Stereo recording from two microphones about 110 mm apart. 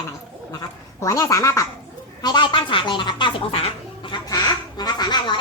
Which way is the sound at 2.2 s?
40° left (ahead or behind).